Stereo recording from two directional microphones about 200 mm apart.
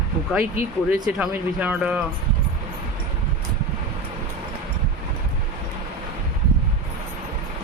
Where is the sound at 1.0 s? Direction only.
5° right (ahead or behind).